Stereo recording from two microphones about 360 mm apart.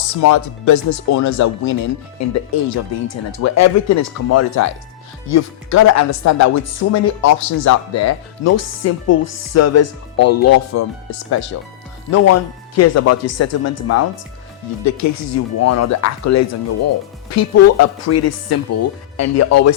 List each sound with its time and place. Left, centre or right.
0.0 s speech: left